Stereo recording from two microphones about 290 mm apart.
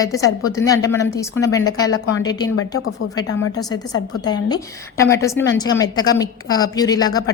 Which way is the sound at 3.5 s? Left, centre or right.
Centre.